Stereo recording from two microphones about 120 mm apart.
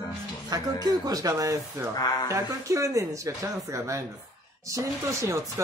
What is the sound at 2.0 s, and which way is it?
Speech, 35° left (ahead or behind).